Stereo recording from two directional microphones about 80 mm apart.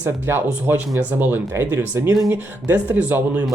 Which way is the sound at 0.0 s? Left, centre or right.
Right.